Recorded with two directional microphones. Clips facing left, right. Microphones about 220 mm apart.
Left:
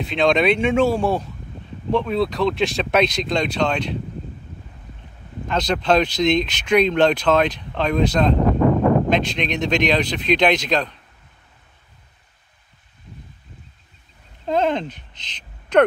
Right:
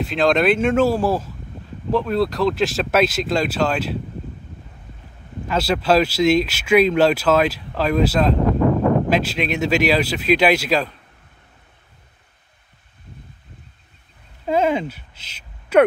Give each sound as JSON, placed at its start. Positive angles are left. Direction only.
{"t": 0.0, "sound": "speech", "side_deg": 0}
{"t": 5.5, "sound": "speech", "side_deg": -5}
{"t": 14.4, "sound": "speech", "side_deg": -5}